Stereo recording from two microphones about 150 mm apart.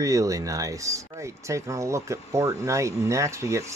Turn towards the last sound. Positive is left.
turn(degrees=-20)  # may be behind; listen again after turning